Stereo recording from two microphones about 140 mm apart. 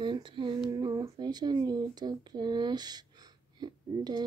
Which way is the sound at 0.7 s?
25° right (ahead or behind).